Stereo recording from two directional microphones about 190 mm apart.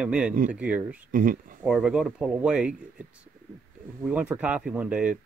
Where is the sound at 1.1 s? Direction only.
45° right (ahead or behind).